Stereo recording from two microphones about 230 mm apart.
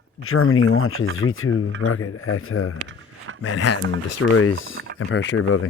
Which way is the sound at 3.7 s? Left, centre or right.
Left.